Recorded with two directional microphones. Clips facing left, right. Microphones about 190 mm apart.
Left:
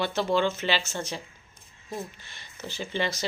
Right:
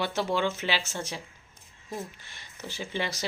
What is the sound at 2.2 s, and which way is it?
Speech, 10° right (ahead or behind).